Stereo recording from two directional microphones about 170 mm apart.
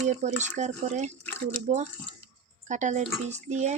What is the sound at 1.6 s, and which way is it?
Speech, 40° right (ahead or behind).